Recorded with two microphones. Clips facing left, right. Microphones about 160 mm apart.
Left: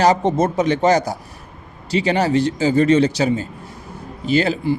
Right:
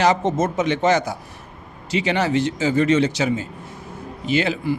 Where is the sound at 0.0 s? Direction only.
35° left (ahead or behind).